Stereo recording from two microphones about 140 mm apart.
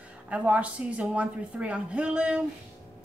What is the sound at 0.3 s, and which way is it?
A woman's voice, 10° right (ahead or behind).